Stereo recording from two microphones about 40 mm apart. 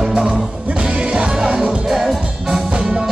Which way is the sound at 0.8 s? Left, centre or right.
Right.